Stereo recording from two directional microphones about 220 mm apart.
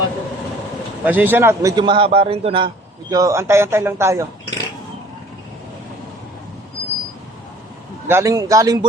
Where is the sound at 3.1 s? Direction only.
15° right (ahead or behind).